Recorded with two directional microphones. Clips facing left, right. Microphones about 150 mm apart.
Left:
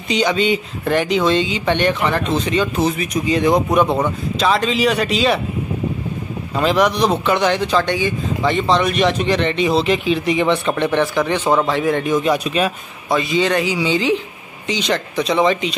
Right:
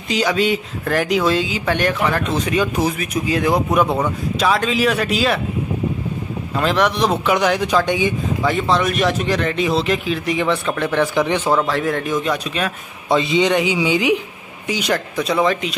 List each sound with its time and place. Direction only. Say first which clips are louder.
0.1 s speech: left 1 dB; 5° right (ahead or behind)
6.5 s speech: left 2 dB; centre (ahead or behind); by 11.4 s 15° right (ahead or behind)
11.6 s speech: left 2 dB; centre (ahead or behind)
13.1 s speech: right 1 dB; 20° right (ahead or behind); by 15.7 s centre (ahead or behind)